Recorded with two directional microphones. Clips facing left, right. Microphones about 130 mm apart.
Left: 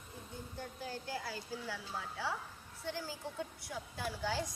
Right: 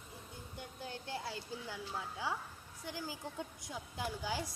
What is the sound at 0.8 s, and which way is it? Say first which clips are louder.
Speech: even; 25° right (ahead or behind).